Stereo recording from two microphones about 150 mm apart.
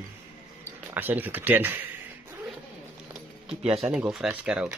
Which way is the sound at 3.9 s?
5° right (ahead or behind).